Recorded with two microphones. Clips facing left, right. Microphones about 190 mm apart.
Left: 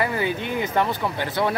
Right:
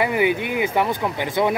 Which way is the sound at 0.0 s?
15° right (ahead or behind).